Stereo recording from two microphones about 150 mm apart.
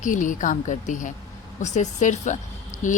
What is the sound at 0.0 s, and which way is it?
A woman's voice, 60° left (ahead or behind).